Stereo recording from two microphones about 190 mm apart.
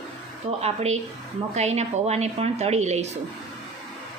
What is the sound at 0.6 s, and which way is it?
A woman's voice, 35° right (ahead or behind).